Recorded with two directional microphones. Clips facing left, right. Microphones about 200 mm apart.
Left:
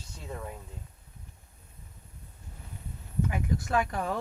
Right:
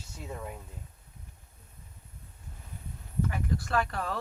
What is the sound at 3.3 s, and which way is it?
Speech, 15° left (ahead or behind).